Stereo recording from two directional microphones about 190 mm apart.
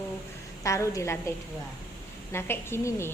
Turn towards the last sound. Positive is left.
turn(degrees=15)  # may be behind; listen again after turning